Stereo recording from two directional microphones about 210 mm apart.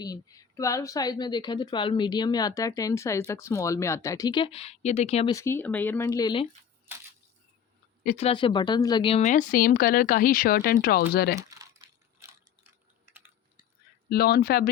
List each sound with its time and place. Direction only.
0.0 s a woman's voice: 15° left (ahead or behind)
5.3 s speech: 15° left (ahead or behind)
8.0 s speech: 30° left (ahead or behind); by 11.3 s 50° left (ahead or behind)
14.1 s speech: 50° left (ahead or behind)